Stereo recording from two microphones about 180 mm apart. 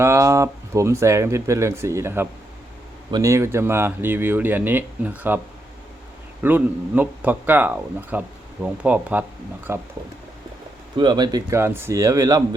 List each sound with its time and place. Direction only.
0.0 s speech: 15° right (ahead or behind)
6.4 s speech: 10° right (ahead or behind)
10.9 s speech: 25° right (ahead or behind)